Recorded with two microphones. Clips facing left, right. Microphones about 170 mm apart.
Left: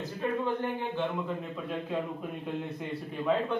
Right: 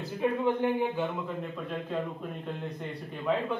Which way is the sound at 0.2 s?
15° right (ahead or behind).